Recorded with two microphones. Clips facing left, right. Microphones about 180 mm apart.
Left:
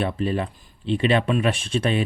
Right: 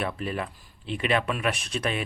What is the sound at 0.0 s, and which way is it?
Speech, 30° left (ahead or behind).